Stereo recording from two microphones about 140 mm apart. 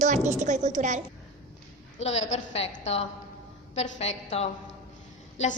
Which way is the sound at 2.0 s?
50° left (ahead or behind).